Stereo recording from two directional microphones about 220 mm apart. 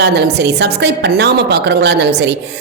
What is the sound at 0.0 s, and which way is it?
A woman's voice, 50° right (ahead or behind).